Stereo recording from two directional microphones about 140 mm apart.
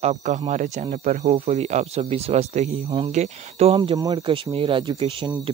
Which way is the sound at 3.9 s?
30° right (ahead or behind).